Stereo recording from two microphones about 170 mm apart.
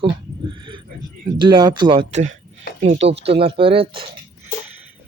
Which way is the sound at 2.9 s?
90° right.